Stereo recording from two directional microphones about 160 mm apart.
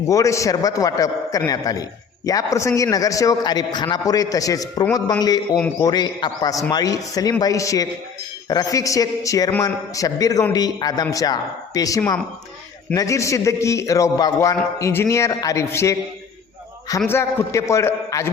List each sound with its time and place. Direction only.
0.1 s a man's voice: 20° left (ahead or behind)
17.1 s a man's voice: 15° left (ahead or behind)